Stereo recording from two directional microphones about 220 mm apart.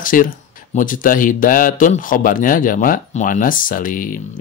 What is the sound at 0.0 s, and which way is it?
Speech, 40° left (ahead or behind).